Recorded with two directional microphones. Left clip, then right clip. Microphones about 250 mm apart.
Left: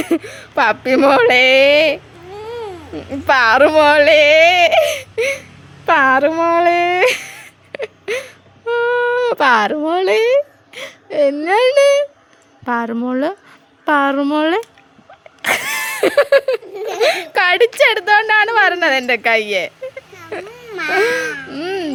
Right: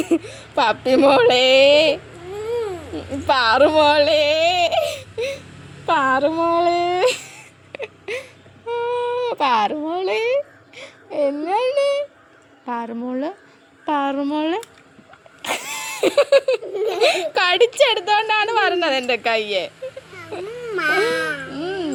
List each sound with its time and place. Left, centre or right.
0.0 s a woman's voice: left
15.4 s vehicle: left
17.0 s a woman's voice: left
20.9 s baby cry: left